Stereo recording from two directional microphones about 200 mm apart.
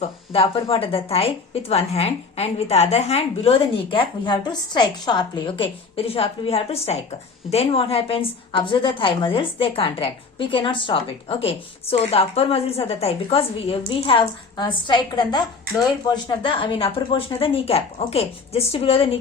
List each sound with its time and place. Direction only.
0.0 s a woman's voice: 30° left (ahead or behind)